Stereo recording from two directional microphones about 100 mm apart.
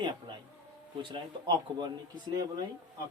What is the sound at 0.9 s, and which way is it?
Speech, 50° right (ahead or behind).